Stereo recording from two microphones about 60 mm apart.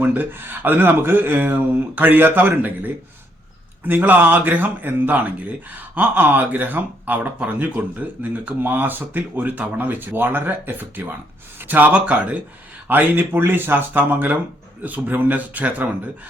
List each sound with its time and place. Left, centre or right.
0.0 s a man's voice: right
12.9 s a man's voice: right